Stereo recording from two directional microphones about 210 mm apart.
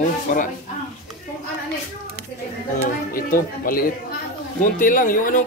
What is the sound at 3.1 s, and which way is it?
Speech, 40° left (ahead or behind).